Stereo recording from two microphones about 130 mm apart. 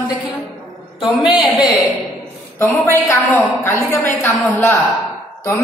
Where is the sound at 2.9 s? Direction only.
15° left (ahead or behind).